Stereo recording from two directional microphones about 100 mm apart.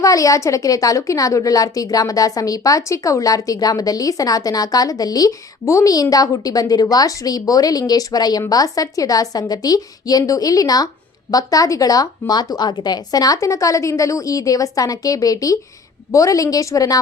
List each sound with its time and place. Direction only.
0.0 s a woman's voice: 35° left (ahead or behind)